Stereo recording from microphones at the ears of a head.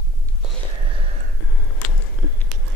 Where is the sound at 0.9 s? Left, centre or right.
Right.